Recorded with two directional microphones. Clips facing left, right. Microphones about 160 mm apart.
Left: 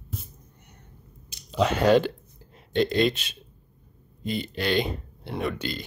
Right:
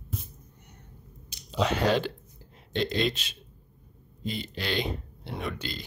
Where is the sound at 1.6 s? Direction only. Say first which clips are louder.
Left 6 dB; 50° left (ahead or behind).